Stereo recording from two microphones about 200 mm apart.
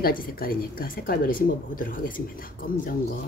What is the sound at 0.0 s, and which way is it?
A woman's voice, 45° left (ahead or behind).